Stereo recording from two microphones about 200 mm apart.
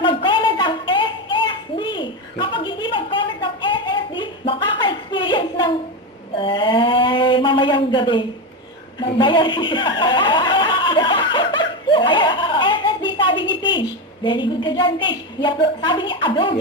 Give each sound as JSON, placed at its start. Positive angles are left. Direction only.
{"t": 0.0, "sound": "a sound", "side_deg": 25}
{"t": 9.0, "sound": "chuckle", "side_deg": 25}
{"t": 14.3, "sound": "a woman's voice", "side_deg": 25}